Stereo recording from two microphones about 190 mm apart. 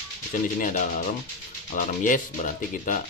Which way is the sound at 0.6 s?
45° left (ahead or behind).